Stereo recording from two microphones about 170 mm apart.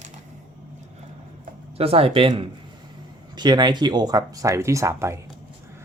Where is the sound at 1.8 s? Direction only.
35° right (ahead or behind); by 5.2 s 15° right (ahead or behind).